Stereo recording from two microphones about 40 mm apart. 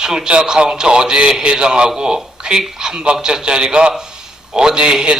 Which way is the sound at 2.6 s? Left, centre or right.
Centre.